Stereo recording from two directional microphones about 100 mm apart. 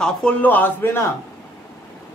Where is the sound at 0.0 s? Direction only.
10° left (ahead or behind).